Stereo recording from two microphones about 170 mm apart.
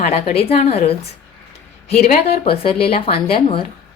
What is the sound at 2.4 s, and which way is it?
A woman's voice, 35° left (ahead or behind).